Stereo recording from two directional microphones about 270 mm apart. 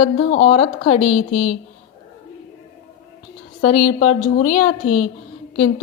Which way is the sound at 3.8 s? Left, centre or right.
Left.